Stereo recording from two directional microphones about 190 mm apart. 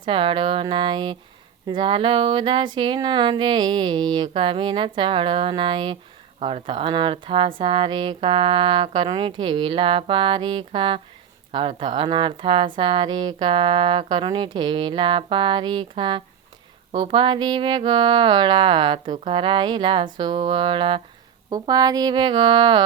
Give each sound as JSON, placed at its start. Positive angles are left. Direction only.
{"t": 0.0, "sound": "a woman's voice", "side_deg": -30}
{"t": 19.1, "sound": "speech", "side_deg": -40}
{"t": 19.4, "sound": "a woman's voice", "side_deg": -25}